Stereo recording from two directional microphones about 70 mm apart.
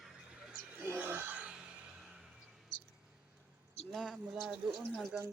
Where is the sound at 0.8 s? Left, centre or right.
Right.